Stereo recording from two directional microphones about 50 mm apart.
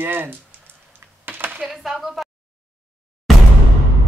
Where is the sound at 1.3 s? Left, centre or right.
Right.